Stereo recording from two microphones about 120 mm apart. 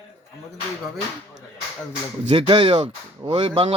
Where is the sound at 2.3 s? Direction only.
45° right (ahead or behind).